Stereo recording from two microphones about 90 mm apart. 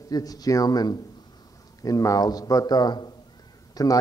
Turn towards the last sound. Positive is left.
turn(degrees=40)  # may be behind; listen again after turning